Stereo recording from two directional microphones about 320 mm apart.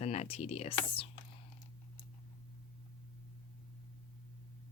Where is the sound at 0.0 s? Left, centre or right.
Centre.